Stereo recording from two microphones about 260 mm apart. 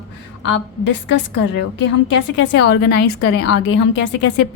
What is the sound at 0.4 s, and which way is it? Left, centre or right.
A woman's voice, left.